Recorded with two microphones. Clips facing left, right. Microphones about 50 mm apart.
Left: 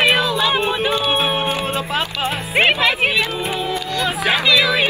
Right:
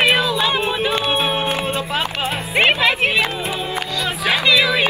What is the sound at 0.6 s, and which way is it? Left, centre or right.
Speech, centre.